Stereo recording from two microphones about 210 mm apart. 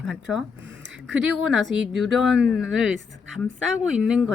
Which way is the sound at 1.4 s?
5° right (ahead or behind).